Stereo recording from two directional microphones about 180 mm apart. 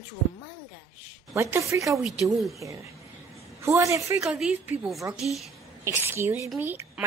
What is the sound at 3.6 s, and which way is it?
Speech, 15° right (ahead or behind).